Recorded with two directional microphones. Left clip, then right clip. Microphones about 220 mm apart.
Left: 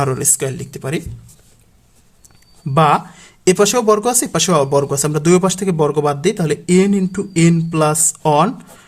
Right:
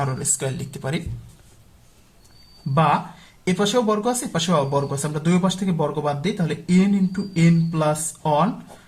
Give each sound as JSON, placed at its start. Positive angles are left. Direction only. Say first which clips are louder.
{"t": 0.0, "sound": "speech", "louder": "left 7 dB", "side_deg": 40}
{"t": 2.7, "sound": "speech", "louder": "left 6 dB", "side_deg": 40}